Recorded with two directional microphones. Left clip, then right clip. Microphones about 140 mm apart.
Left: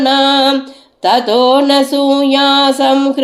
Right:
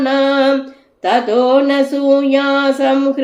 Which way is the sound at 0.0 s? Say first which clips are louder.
Left 3 dB; 15° left (ahead or behind).